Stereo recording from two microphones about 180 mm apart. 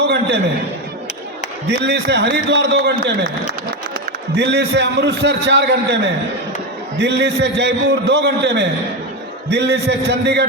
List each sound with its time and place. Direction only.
0.0 s a sound: 75° right (ahead or behind)
1.7 s a man's voice: 70° right (ahead or behind)
4.4 s a man's voice: 70° right (ahead or behind)
7.0 s a man's voice: 75° right (ahead or behind)